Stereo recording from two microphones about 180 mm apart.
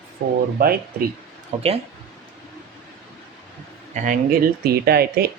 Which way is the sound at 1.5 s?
35° right (ahead or behind).